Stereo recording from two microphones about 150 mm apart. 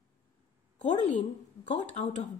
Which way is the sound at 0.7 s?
50° left (ahead or behind).